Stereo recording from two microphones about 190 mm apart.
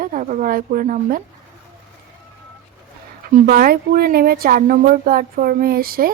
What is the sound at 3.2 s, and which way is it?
Speech, 50° right (ahead or behind).